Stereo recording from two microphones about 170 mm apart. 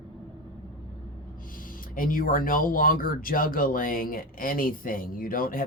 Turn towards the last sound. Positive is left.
turn(degrees=55)  # may be behind; listen again after turning